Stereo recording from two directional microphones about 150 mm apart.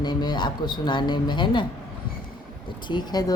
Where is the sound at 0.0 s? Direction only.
30° left (ahead or behind).